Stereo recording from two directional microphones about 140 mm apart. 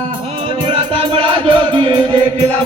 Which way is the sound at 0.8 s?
40° right (ahead or behind).